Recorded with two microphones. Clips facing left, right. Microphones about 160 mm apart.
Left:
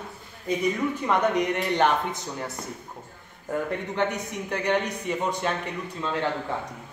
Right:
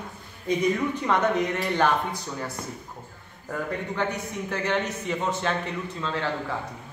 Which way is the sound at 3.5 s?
20° left (ahead or behind).